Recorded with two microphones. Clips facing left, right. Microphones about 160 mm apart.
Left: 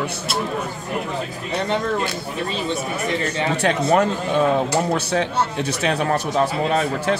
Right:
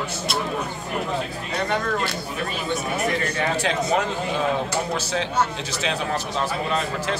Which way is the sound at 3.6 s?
55° left (ahead or behind).